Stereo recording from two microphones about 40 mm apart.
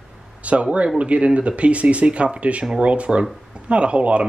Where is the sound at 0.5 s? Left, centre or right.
Right.